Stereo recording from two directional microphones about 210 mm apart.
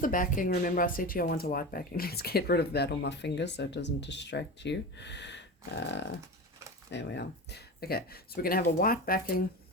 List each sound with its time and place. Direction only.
0.0 s speech: 40° left (ahead or behind)